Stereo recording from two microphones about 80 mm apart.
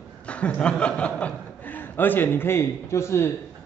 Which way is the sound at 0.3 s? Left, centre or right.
Centre.